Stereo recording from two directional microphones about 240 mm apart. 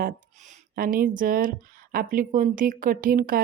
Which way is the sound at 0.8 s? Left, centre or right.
Right.